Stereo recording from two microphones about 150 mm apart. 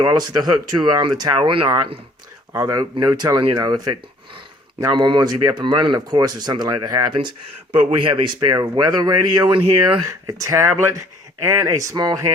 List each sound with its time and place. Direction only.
0.0 s speech: 25° right (ahead or behind)
2.5 s speech: 20° right (ahead or behind)
4.8 s speech: 30° right (ahead or behind)